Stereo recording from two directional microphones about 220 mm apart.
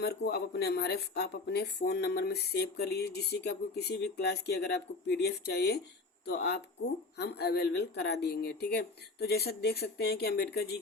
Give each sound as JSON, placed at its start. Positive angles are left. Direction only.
{"t": 0.0, "sound": "speech", "side_deg": 45}